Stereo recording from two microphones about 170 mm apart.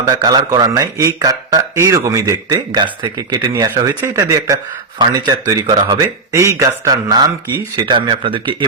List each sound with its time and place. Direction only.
0.0 s speech: 20° right (ahead or behind)